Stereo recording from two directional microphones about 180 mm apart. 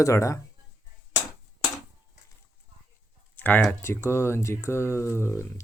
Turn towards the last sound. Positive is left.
turn(degrees=15)  # may be behind; listen again after turning